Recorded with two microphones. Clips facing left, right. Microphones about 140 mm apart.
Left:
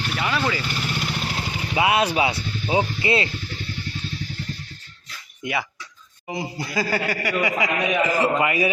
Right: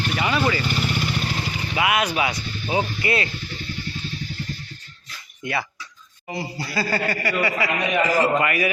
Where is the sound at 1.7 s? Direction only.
30° left (ahead or behind).